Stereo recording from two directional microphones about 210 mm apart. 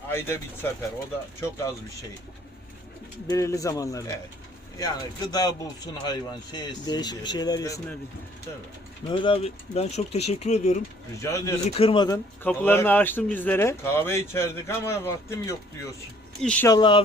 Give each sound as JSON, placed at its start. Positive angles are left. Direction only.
{"t": 0.1, "sound": "a man's voice", "side_deg": 10}
{"t": 3.2, "sound": "a man's voice", "side_deg": 15}
{"t": 9.0, "sound": "speech", "side_deg": 25}
{"t": 11.2, "sound": "a man's voice", "side_deg": 15}
{"t": 11.8, "sound": "a man's voice", "side_deg": 25}
{"t": 16.6, "sound": "speech", "side_deg": 20}